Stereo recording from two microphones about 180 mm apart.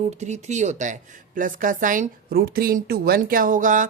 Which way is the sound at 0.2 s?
40° right (ahead or behind).